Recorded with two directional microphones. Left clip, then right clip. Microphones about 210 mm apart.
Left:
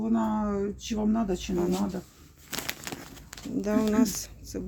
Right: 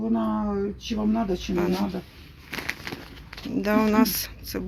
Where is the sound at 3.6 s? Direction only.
5° left (ahead or behind).